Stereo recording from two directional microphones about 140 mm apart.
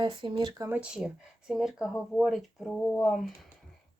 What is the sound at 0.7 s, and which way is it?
Speech, 10° right (ahead or behind).